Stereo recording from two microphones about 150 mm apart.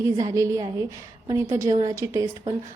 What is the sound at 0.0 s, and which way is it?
A woman's voice, 20° right (ahead or behind).